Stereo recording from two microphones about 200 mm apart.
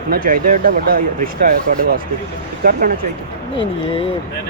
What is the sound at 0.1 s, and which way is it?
Speech, 45° right (ahead or behind).